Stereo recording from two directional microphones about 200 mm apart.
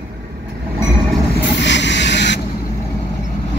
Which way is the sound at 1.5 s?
60° left (ahead or behind).